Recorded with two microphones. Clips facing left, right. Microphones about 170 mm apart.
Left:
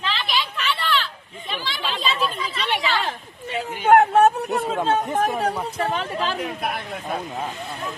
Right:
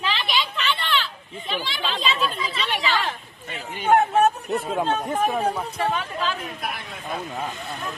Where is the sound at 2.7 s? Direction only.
15° left (ahead or behind).